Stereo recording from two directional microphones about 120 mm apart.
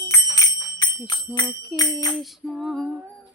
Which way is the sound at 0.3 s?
35° left (ahead or behind).